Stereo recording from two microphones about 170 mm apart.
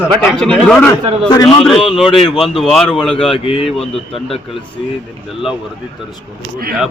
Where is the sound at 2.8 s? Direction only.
30° left (ahead or behind).